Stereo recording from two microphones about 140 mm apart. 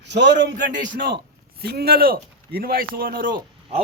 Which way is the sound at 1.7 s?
90° right.